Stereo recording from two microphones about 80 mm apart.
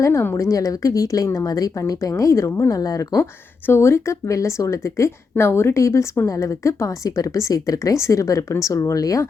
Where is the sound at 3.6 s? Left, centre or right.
Left.